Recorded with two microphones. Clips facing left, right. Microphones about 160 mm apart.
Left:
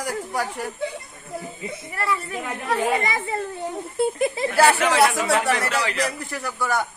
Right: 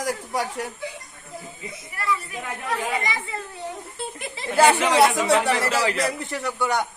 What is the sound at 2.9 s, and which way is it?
Speech, 55° left (ahead or behind).